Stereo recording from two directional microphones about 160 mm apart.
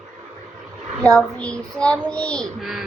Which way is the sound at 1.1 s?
5° left (ahead or behind).